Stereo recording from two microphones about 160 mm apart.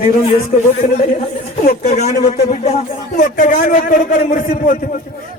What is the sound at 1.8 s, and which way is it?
Speech, 45° left (ahead or behind).